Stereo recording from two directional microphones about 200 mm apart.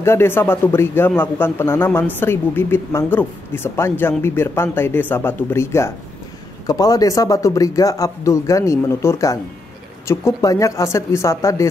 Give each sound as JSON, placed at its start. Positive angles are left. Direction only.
{"t": 0.0, "sound": "speech", "side_deg": 10}